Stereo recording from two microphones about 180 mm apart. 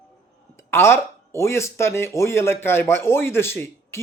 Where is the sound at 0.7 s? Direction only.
15° left (ahead or behind).